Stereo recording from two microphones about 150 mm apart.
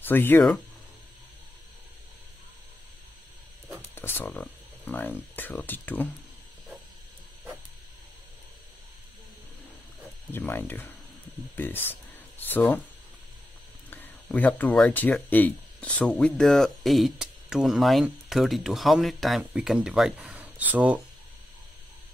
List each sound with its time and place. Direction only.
0.0 s speech: 15° left (ahead or behind)
3.9 s a sound: 15° left (ahead or behind)
4.3 s speech: 5° left (ahead or behind)
10.3 s speech: 15° left (ahead or behind)
13.8 s speech: 10° left (ahead or behind); by 21.0 s 10° right (ahead or behind)